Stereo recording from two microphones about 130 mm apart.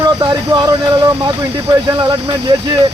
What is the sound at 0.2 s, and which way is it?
Speech, 30° right (ahead or behind).